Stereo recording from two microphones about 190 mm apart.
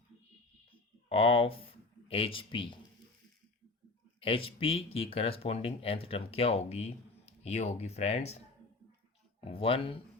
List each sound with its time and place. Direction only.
1.1 s speech: 30° left (ahead or behind)
4.2 s speech: 30° left (ahead or behind)
9.4 s speech: 30° left (ahead or behind)